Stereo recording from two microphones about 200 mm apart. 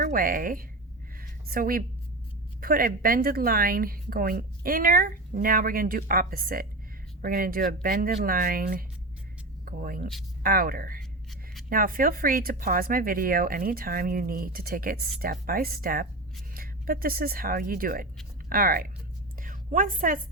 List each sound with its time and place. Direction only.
0.0 s a woman's voice: 45° right (ahead or behind)
1.2 s a sound: 45° right (ahead or behind)
2.6 s a woman's voice: 45° right (ahead or behind)